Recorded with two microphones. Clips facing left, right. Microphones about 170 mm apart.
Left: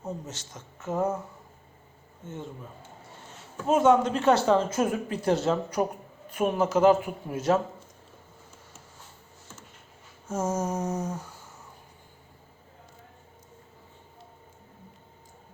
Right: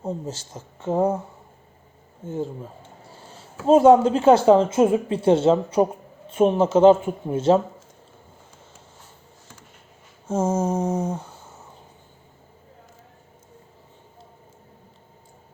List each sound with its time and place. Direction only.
0.0 s speech: 30° right (ahead or behind)
2.2 s speech: 35° right (ahead or behind)
3.1 s a sound: 30° right (ahead or behind)
4.4 s speech: 30° right (ahead or behind)
10.2 s speech: 30° right (ahead or behind)